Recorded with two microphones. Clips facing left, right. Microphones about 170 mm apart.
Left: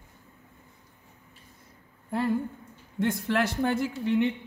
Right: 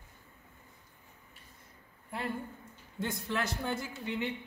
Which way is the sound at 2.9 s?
75° left (ahead or behind).